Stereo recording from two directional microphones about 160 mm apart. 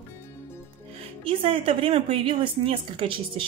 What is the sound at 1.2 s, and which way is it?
A woman's voice, 35° right (ahead or behind).